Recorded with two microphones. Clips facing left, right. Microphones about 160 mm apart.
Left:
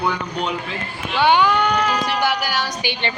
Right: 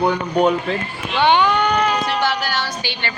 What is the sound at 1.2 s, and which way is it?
Speech, 5° left (ahead or behind).